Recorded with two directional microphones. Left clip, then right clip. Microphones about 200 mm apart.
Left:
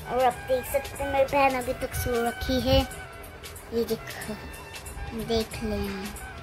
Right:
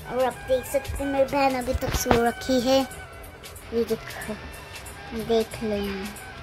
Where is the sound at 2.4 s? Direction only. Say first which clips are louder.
Right 3 dB; 15° right (ahead or behind).